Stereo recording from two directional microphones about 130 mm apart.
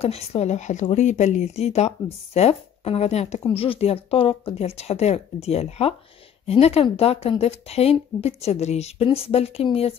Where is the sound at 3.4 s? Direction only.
45° left (ahead or behind).